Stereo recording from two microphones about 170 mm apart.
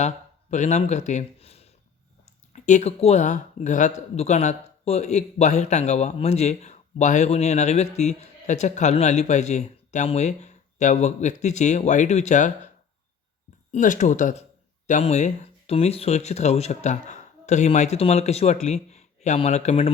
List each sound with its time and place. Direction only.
0.5 s speech: 45° left (ahead or behind)
13.7 s speech: 50° left (ahead or behind)